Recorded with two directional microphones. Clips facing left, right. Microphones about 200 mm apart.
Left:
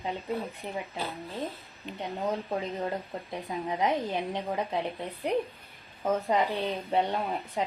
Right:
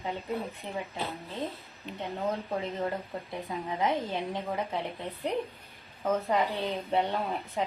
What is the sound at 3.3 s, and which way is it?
Speech, 20° left (ahead or behind).